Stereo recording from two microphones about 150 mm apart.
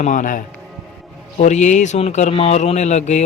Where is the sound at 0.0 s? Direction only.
55° left (ahead or behind).